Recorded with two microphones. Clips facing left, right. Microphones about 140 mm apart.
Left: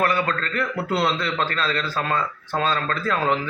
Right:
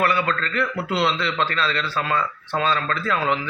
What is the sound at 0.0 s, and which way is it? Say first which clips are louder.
A man's voice: right 1 dB; 40° left (ahead or behind).